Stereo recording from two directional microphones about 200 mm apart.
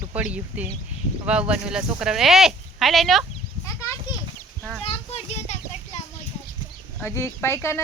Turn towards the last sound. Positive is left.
turn(degrees=15)  # may be behind; listen again after turning